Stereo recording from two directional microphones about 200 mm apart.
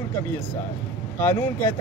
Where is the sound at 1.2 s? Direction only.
10° left (ahead or behind).